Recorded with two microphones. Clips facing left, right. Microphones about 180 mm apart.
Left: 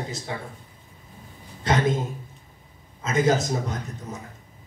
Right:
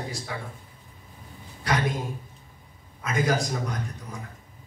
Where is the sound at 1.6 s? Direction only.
25° left (ahead or behind).